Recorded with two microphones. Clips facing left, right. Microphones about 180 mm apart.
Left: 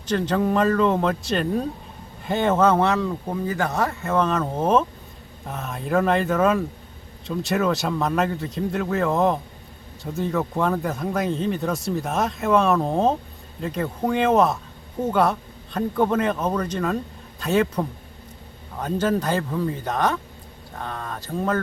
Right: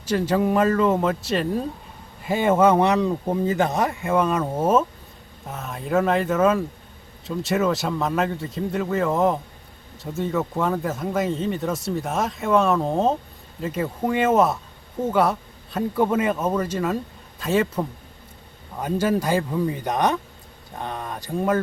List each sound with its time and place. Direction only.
0.0 s speech: 10° right (ahead or behind)